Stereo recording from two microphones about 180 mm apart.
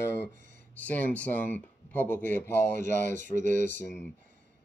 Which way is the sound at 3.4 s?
45° right (ahead or behind).